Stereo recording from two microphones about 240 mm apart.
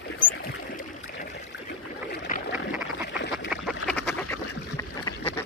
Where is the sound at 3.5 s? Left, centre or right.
Centre.